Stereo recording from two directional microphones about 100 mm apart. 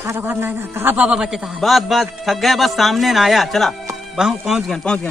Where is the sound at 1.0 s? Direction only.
5° right (ahead or behind).